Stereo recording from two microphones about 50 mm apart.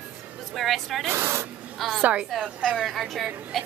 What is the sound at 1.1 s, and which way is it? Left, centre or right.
Speech, right.